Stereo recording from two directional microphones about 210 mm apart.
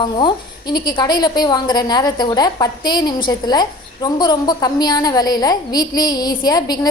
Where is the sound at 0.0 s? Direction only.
20° left (ahead or behind).